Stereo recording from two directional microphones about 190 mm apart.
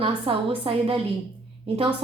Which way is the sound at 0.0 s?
30° right (ahead or behind).